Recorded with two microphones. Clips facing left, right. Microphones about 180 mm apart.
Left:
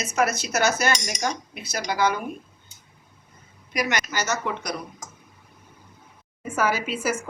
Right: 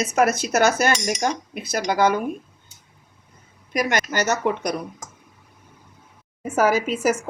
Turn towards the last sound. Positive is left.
turn(degrees=-45)  # may be behind; listen again after turning